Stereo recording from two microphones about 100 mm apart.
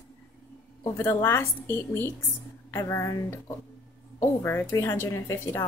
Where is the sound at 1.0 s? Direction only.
25° left (ahead or behind).